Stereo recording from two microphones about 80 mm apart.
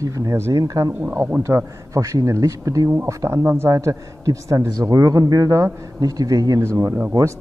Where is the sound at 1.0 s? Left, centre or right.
Right.